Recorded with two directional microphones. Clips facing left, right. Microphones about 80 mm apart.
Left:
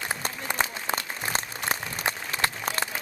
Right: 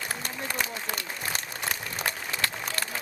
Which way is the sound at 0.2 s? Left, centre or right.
Left.